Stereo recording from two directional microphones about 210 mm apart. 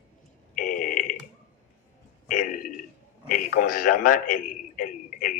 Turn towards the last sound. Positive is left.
turn(degrees=40)  # may be behind; listen again after turning